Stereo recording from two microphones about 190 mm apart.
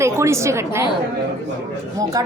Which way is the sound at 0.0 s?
15° right (ahead or behind).